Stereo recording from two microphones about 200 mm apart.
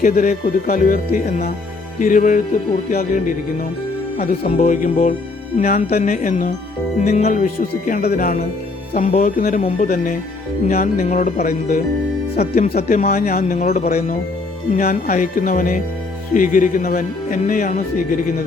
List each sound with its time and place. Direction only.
0.0 s speech: 40° left (ahead or behind)
12.7 s speech: 45° left (ahead or behind)